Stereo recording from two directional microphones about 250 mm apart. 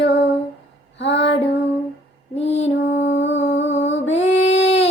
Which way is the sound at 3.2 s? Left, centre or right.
Left.